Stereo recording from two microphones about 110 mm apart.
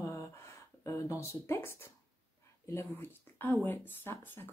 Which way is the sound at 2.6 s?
25° left (ahead or behind).